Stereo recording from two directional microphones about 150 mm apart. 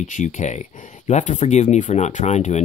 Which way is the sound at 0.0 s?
55° left (ahead or behind).